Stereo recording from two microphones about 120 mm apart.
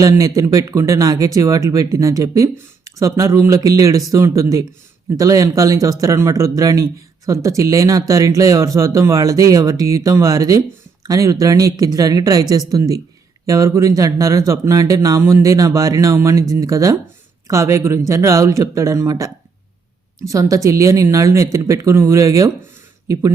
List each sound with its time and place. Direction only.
0.0 s speech: 30° right (ahead or behind)